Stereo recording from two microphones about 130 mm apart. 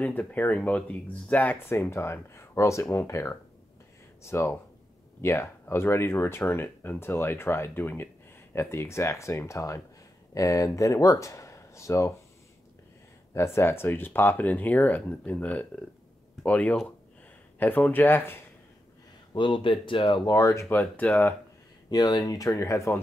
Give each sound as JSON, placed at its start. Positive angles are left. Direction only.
{"t": 0.0, "sound": "speech", "side_deg": 10}
{"t": 13.3, "sound": "speech", "side_deg": 20}
{"t": 19.3, "sound": "speech", "side_deg": 40}
{"t": 20.7, "sound": "speech", "side_deg": 15}
{"t": 21.9, "sound": "speech", "side_deg": 30}